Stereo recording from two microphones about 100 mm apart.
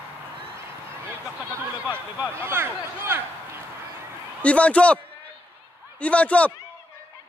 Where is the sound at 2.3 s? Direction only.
25° right (ahead or behind).